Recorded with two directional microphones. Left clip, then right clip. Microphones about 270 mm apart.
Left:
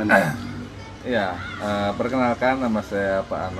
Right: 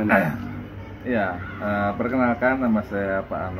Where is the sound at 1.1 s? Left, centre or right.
Centre.